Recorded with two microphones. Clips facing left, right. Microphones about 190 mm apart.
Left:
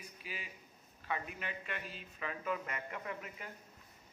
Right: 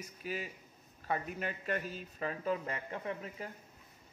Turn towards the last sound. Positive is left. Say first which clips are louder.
# right 4 dB
turn(degrees=-30)  # may be behind; listen again after turning